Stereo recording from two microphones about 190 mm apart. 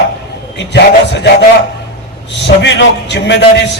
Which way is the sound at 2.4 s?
65° left (ahead or behind).